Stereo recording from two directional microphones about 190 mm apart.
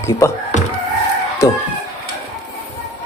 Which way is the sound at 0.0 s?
15° left (ahead or behind).